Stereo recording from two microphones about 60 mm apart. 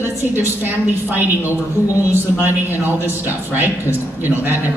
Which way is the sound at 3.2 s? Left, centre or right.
Right.